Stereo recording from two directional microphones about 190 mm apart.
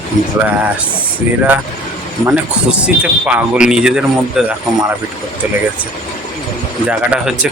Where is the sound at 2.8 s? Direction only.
5° right (ahead or behind).